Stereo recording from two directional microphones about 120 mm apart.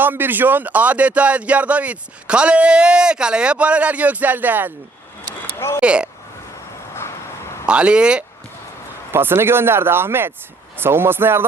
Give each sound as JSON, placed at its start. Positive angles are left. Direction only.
{"t": 0.0, "sound": "speech", "side_deg": -15}
{"t": 5.5, "sound": "a sound", "side_deg": 20}
{"t": 5.8, "sound": "speech", "side_deg": -10}
{"t": 7.7, "sound": "speech", "side_deg": -10}
{"t": 9.1, "sound": "speech", "side_deg": -20}